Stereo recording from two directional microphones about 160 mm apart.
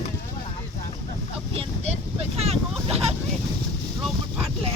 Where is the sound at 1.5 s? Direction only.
40° right (ahead or behind).